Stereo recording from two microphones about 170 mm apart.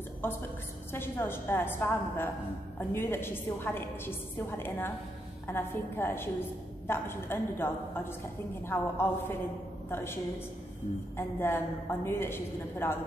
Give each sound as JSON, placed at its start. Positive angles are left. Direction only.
{"t": 0.9, "sound": "a woman's voice", "side_deg": 15}
{"t": 11.1, "sound": "a woman's voice", "side_deg": 15}